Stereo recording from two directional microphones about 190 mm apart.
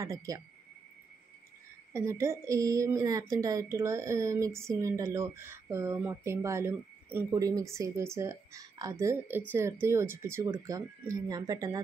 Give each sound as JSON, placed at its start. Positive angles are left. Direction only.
{"t": 0.0, "sound": "speech", "side_deg": -15}
{"t": 2.0, "sound": "speech", "side_deg": -15}